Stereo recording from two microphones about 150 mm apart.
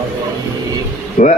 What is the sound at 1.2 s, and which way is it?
Speech, 60° left (ahead or behind).